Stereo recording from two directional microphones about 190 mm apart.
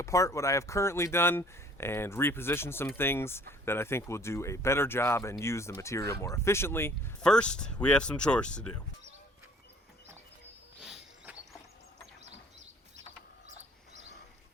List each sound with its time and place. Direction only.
0.0 s speech: 15° left (ahead or behind)
10.8 s cricket: 5° right (ahead or behind)
13.5 s bird: 35° right (ahead or behind)